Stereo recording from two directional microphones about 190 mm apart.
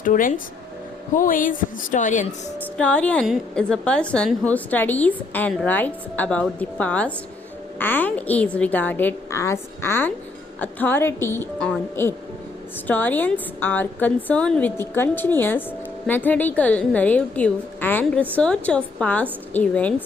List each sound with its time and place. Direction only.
0.0 s a woman's voice: 45° left (ahead or behind)
2.7 s a woman's voice: 5° left (ahead or behind)
12.9 s a woman's voice: 10° left (ahead or behind)